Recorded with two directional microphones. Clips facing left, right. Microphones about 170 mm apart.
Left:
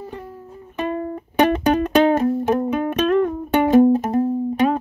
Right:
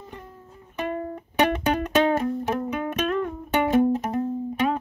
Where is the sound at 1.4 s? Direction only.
35° left (ahead or behind).